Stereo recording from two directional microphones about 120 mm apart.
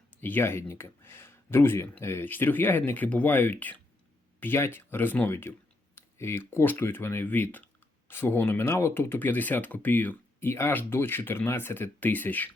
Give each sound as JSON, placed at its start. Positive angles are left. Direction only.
{"t": 0.2, "sound": "speech", "side_deg": 15}